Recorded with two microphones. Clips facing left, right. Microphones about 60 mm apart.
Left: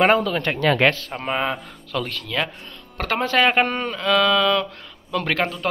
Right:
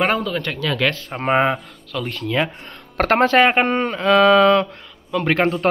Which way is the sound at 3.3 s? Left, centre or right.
Right.